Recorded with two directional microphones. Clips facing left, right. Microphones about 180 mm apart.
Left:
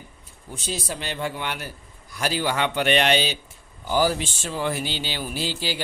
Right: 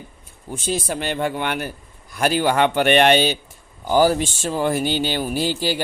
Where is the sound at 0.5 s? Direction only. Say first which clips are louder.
Right 7 dB; 55° right (ahead or behind).